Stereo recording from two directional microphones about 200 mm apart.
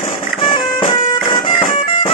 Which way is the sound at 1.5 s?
30° left (ahead or behind).